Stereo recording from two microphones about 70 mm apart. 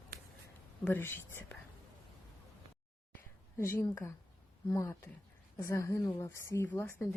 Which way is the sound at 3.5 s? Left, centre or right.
Left.